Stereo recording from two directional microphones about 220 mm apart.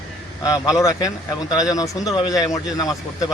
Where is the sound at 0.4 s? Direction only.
15° left (ahead or behind).